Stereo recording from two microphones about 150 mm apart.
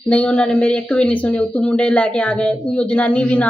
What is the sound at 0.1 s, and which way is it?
Speech, 5° left (ahead or behind).